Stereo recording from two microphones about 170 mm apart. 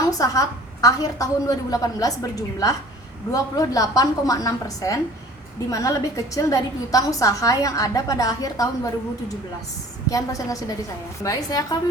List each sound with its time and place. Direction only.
0.0 s a woman's voice: 20° left (ahead or behind)
10.1 s a woman's voice: 20° left (ahead or behind)